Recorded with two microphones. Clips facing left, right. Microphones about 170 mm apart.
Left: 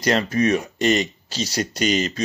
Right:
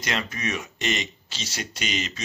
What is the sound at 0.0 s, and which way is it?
Speech, 35° left (ahead or behind).